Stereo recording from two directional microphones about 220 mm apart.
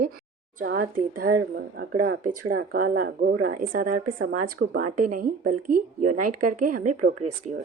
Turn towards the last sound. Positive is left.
turn(degrees=-35)  # may be behind; listen again after turning